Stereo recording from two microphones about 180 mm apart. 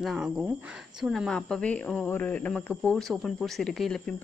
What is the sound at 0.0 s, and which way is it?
Speech, centre (ahead or behind).